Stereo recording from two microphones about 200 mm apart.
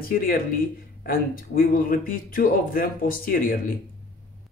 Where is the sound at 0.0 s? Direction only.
45° left (ahead or behind).